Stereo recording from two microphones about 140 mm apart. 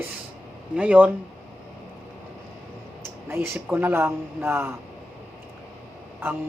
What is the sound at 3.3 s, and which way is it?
Speech, 20° right (ahead or behind).